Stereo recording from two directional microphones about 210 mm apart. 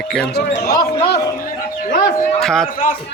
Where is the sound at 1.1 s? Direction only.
45° left (ahead or behind).